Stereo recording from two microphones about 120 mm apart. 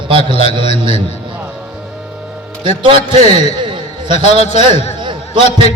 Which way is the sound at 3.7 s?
45° right (ahead or behind).